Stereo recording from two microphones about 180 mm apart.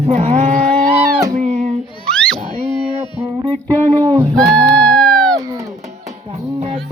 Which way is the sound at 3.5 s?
25° right (ahead or behind).